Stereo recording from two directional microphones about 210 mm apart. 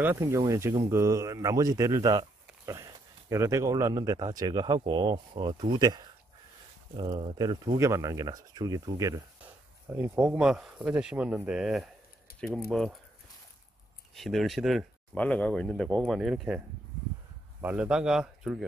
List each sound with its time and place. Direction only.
0.0 s speech: 10° right (ahead or behind)
14.1 s speech: centre (ahead or behind)